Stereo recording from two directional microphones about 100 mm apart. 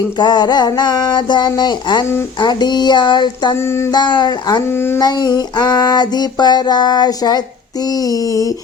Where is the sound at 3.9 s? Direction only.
45° left (ahead or behind).